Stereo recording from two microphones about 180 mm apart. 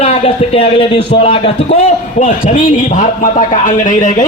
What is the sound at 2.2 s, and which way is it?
A man's voice, 40° left (ahead or behind).